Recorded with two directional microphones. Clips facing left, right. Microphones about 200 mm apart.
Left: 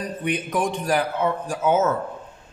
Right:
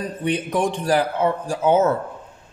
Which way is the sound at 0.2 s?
30° right (ahead or behind).